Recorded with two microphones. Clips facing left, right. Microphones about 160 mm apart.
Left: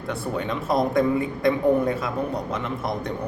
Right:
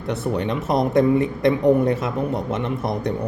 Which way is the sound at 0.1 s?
20° right (ahead or behind).